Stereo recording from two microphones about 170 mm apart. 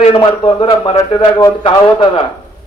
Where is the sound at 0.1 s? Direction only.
30° left (ahead or behind).